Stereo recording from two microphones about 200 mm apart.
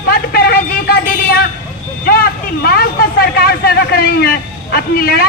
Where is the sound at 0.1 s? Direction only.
50° left (ahead or behind).